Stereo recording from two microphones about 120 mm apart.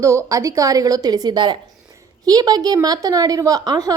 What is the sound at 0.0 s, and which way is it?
A woman's voice, 25° right (ahead or behind).